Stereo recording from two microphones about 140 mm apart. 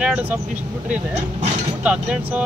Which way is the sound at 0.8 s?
55° right (ahead or behind).